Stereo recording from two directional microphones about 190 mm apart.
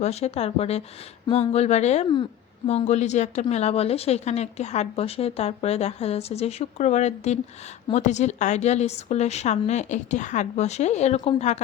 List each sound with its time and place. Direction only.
0.0 s a woman's voice: 35° left (ahead or behind)